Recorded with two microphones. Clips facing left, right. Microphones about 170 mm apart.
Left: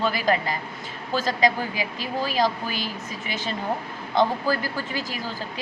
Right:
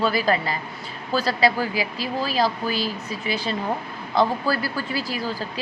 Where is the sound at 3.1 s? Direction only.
35° right (ahead or behind).